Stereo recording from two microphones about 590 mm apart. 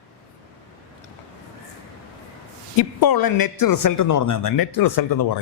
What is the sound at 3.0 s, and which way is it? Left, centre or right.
Speech, left.